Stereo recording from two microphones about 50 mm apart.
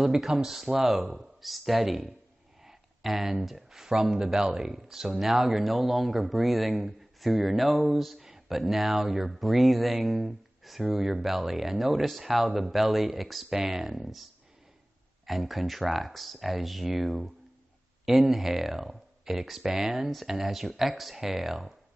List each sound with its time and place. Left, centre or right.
0.0 s speech: centre